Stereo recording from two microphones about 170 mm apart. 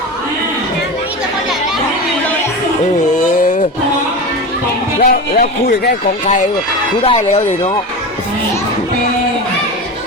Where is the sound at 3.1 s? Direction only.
55° left (ahead or behind).